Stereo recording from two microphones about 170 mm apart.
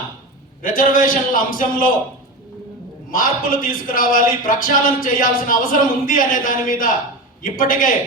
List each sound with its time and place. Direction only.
0.6 s a man's voice: 55° left (ahead or behind)
3.1 s a man's voice: 55° left (ahead or behind)